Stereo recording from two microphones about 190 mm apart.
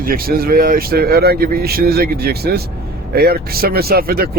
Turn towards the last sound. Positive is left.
turn(degrees=-50)  # may be behind; listen again after turning